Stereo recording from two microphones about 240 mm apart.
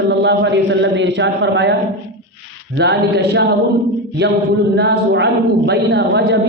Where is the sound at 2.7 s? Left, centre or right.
Right.